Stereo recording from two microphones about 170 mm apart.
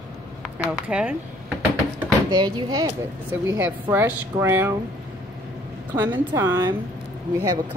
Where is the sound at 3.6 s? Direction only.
10° right (ahead or behind).